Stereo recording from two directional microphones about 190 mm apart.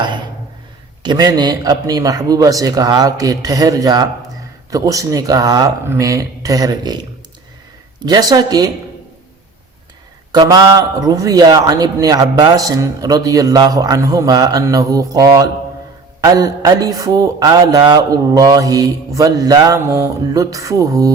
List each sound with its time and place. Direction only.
1.0 s a man's voice: 20° right (ahead or behind)
10.3 s a man's voice: 20° right (ahead or behind)